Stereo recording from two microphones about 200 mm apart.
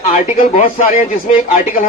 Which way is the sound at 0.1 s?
40° left (ahead or behind).